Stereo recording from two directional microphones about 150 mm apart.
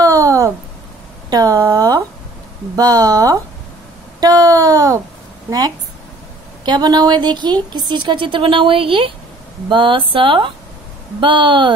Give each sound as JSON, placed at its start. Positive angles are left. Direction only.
{"t": 0.0, "sound": "a sound", "side_deg": -25}
{"t": 2.7, "sound": "speech", "side_deg": -25}
{"t": 6.6, "sound": "a woman's voice", "side_deg": -30}